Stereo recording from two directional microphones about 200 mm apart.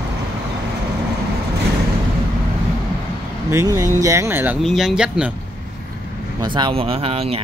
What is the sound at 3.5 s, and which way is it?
Speech, 15° right (ahead or behind).